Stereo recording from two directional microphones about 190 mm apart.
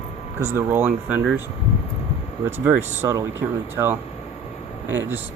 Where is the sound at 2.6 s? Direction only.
15° right (ahead or behind).